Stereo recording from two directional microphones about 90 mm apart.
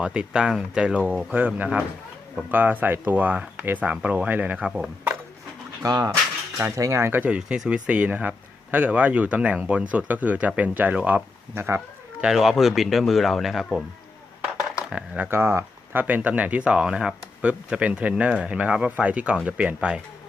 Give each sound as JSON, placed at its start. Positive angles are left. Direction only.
{"t": 0.0, "sound": "speech", "side_deg": -10}
{"t": 5.8, "sound": "speech", "side_deg": -40}
{"t": 7.3, "sound": "speech", "side_deg": -10}
{"t": 12.2, "sound": "speech", "side_deg": -5}
{"t": 14.8, "sound": "speech", "side_deg": -10}
{"t": 15.3, "sound": "speech", "side_deg": -25}